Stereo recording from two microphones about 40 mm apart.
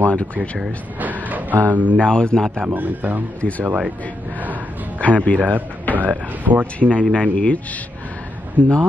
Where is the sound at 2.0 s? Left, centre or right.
Left.